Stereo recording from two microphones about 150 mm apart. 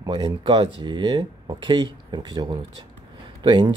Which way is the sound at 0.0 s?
30° right (ahead or behind).